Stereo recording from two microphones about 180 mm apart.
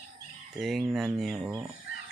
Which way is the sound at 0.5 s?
Centre (ahead or behind).